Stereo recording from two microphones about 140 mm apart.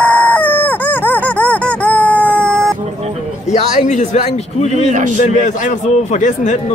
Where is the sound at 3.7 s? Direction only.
60° left (ahead or behind).